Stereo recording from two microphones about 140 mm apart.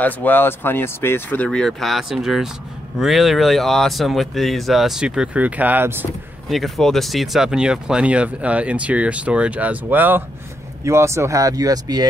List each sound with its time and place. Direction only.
0.0 s speech: 15° left (ahead or behind); by 6.0 s 15° right (ahead or behind)
6.5 s speech: centre (ahead or behind); by 12.1 s 25° right (ahead or behind)